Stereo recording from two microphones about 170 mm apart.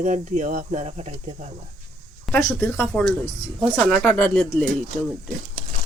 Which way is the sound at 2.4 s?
20° left (ahead or behind).